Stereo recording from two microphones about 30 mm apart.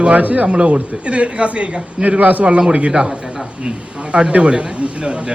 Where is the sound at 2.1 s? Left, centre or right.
Right.